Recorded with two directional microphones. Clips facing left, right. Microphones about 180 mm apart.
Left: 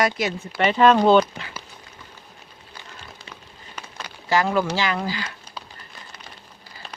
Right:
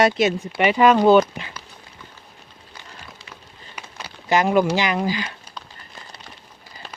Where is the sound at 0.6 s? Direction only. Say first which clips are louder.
Even; 10° right (ahead or behind).